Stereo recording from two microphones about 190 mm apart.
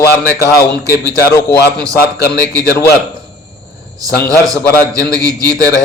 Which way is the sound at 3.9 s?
20° right (ahead or behind).